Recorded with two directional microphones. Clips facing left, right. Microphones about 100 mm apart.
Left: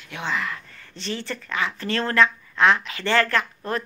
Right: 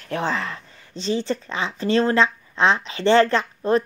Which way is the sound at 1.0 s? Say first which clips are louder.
Right 7 dB; 20° right (ahead or behind).